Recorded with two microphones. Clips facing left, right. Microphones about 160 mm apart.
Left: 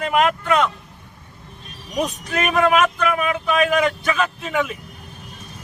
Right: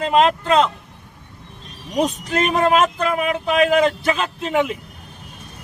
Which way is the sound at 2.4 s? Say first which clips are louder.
Right 1 dB; 30° right (ahead or behind).